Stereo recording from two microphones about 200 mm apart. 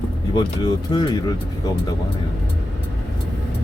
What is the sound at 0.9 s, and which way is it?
Speech, 20° left (ahead or behind).